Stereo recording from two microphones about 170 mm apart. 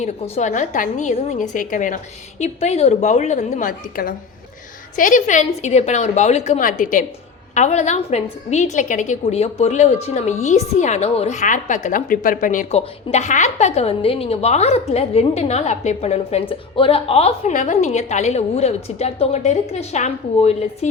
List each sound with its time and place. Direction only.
0.0 s a woman's voice: 45° left (ahead or behind)
2.4 s a woman's voice: 40° left (ahead or behind)